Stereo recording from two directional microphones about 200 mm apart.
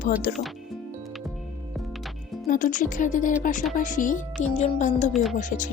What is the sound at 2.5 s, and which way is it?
Speech, 40° left (ahead or behind).